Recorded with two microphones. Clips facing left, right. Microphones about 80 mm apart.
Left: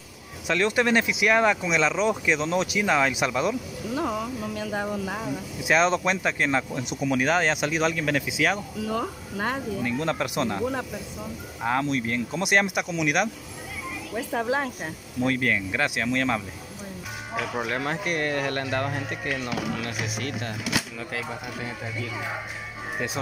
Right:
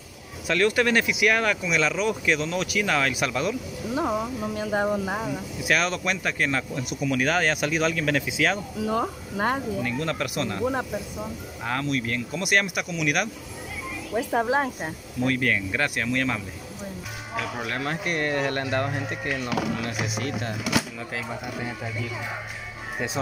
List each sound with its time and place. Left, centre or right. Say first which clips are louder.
0.5 s speech: right 1 dB; centre
3.9 s speech: right 2 dB; centre
5.6 s speech: left 4 dB; left
6.3 s speech: left 1 dB; centre
7.9 s speech: right 1 dB; centre
8.8 s speech: right 4 dB; right
9.8 s speech: left 1 dB; centre
10.6 s speech: right 2 dB; centre
11.8 s speech: left 1 dB; centre
12.4 s speech: left 1 dB; left
14.3 s speech: right 2 dB; right
15.2 s speech: even; centre